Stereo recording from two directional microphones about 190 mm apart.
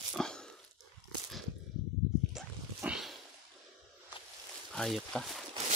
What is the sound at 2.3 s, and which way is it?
Dog, 5° right (ahead or behind).